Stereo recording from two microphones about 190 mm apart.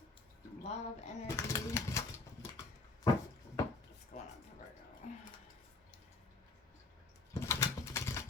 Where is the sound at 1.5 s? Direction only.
15° left (ahead or behind).